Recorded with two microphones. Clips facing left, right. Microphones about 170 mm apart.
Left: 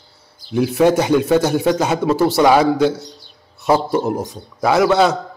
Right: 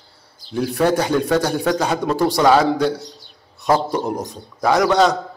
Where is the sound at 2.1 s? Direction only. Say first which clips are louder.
Left 2 dB; 15° right (ahead or behind).